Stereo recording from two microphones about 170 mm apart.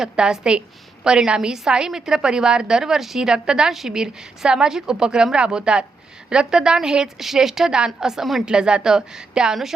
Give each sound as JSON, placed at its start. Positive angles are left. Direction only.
{"t": 0.0, "sound": "a woman's voice", "side_deg": -5}